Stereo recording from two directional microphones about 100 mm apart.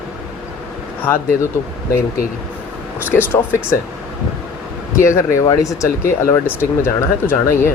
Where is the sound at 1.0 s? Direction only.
20° left (ahead or behind).